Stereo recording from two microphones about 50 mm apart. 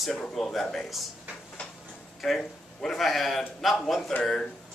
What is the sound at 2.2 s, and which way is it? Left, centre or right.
A man's voice, centre.